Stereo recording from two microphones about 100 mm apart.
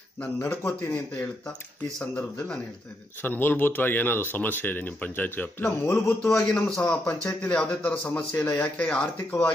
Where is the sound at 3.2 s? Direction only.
20° left (ahead or behind).